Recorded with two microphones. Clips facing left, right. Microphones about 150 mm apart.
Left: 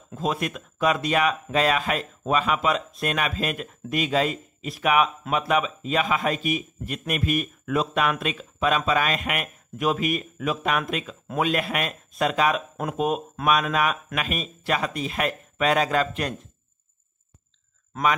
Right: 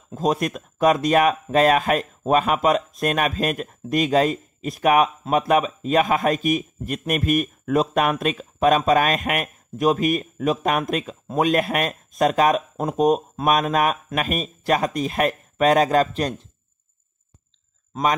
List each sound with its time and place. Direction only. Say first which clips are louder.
0.1 s speech: right 5 dB; 40° right (ahead or behind)